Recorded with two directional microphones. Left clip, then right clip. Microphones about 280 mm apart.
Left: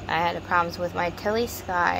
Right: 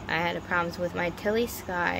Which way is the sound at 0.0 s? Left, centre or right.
Centre.